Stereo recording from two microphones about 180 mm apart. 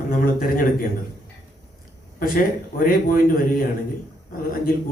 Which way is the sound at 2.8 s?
50° left (ahead or behind).